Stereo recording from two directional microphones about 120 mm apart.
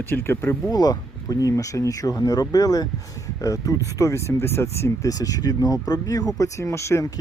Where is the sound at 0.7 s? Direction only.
35° left (ahead or behind).